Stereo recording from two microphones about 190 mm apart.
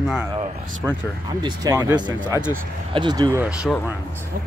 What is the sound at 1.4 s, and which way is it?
Speech, 15° right (ahead or behind).